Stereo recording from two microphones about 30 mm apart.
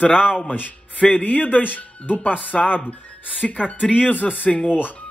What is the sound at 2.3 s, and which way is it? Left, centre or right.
Speech, left.